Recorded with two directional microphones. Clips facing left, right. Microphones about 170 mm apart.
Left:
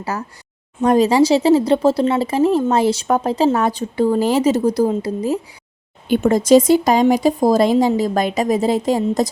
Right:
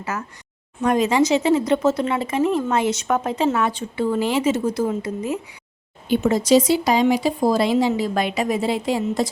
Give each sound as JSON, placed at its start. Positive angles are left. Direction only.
{"t": 0.0, "sound": "speech", "side_deg": 35}
{"t": 6.1, "sound": "speech", "side_deg": 50}